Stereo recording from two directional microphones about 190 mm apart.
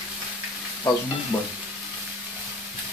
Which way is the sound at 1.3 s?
20° left (ahead or behind).